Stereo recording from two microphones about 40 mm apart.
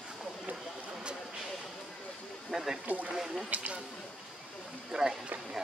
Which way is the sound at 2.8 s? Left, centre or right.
Right.